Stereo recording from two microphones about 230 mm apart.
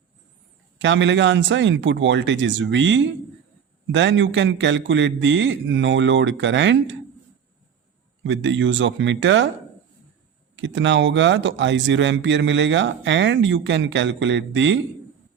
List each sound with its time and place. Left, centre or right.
0.8 s speech: right
8.2 s speech: right
10.5 s speech: right